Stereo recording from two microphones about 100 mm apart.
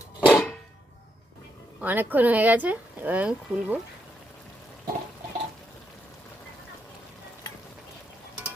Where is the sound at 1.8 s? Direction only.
20° right (ahead or behind).